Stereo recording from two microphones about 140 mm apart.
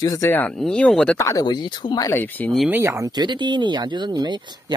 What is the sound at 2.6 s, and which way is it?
Speech, 15° right (ahead or behind).